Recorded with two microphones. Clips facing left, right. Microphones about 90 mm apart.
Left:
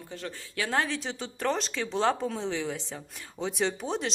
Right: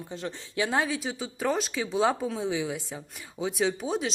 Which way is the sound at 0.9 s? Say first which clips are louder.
Right 2 dB; 5° right (ahead or behind).